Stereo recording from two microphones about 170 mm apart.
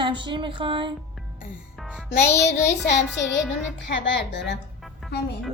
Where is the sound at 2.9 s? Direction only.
90° left.